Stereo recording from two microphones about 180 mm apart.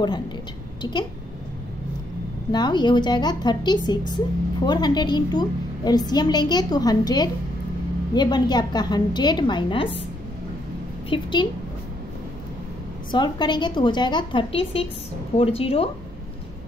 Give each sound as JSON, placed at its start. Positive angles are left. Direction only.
{"t": 0.8, "sound": "a woman's voice", "side_deg": 20}
{"t": 2.5, "sound": "a woman's voice", "side_deg": 25}
{"t": 11.1, "sound": "a woman's voice", "side_deg": 30}
{"t": 13.1, "sound": "a woman's voice", "side_deg": 25}